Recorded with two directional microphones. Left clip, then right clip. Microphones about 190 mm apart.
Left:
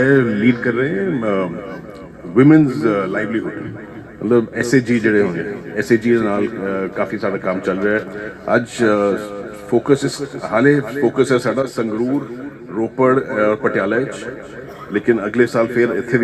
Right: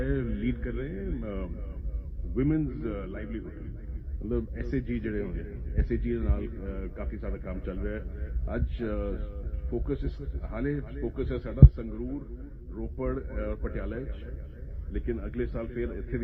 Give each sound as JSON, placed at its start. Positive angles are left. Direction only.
{"t": 0.0, "sound": "a man's voice", "side_deg": -35}